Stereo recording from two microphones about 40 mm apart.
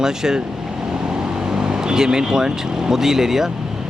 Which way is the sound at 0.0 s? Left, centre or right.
Centre.